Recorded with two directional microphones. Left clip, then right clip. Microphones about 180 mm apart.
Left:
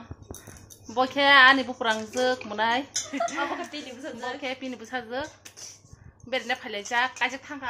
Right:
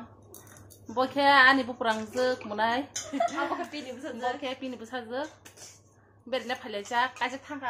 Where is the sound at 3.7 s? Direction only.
Centre (ahead or behind).